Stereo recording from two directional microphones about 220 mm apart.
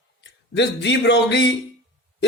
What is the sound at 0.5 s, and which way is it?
Speech, 55° left (ahead or behind).